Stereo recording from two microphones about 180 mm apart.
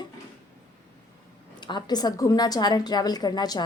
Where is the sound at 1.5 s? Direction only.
25° left (ahead or behind).